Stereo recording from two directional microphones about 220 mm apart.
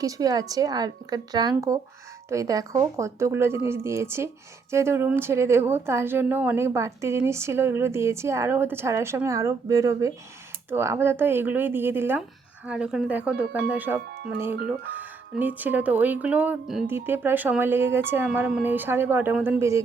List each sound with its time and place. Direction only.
0.0 s speech: 15° right (ahead or behind)
14.0 s speech: 45° right (ahead or behind)
14.6 s speech: 5° right (ahead or behind)